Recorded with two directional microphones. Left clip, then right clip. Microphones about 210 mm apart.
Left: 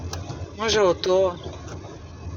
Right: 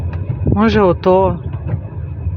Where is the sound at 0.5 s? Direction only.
25° right (ahead or behind).